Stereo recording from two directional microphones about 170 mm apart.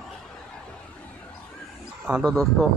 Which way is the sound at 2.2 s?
Centre (ahead or behind).